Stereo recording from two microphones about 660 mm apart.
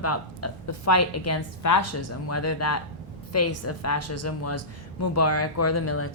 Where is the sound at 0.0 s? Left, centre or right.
Left.